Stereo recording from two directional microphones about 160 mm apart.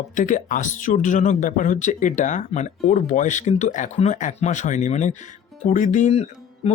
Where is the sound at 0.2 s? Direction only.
55° left (ahead or behind).